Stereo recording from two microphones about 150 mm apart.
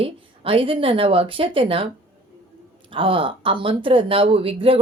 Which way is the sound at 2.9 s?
35° right (ahead or behind).